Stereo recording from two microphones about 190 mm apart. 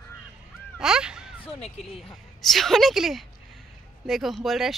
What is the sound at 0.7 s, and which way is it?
Crow, 5° right (ahead or behind).